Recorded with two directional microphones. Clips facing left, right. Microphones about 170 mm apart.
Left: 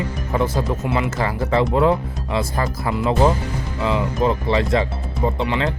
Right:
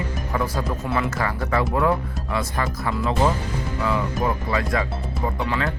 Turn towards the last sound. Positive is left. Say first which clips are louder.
# left 4 dB
turn(degrees=20)  # may be behind; listen again after turning